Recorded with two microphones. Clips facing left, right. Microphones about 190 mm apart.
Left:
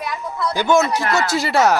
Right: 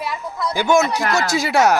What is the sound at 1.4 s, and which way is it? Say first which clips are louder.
Speech: right 1 dB; 15° right (ahead or behind).